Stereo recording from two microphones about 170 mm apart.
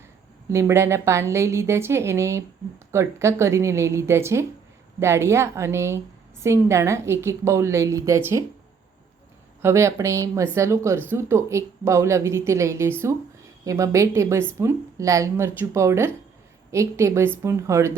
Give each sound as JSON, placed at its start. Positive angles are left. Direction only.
{"t": 0.4, "sound": "a woman's voice", "side_deg": -15}
{"t": 9.6, "sound": "a woman's voice", "side_deg": -15}